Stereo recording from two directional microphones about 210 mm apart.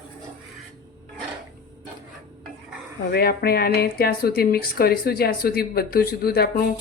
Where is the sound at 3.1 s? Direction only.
45° left (ahead or behind).